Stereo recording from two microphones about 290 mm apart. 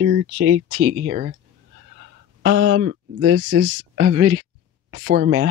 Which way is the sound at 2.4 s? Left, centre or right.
Right.